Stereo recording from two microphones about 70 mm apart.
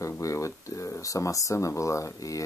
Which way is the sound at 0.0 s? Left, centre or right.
Left.